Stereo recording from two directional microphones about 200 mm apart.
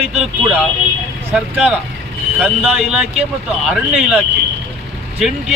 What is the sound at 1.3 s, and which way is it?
Speech, 5° right (ahead or behind).